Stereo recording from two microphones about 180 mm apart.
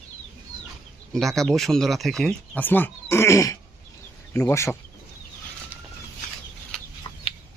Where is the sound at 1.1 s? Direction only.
Centre (ahead or behind).